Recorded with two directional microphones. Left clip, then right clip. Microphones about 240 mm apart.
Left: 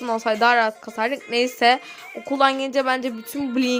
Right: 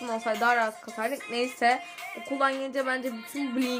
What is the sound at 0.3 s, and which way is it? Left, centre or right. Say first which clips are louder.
Speech: left 7 dB; left.